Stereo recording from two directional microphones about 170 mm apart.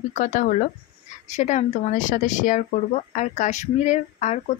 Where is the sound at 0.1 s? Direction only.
45° left (ahead or behind).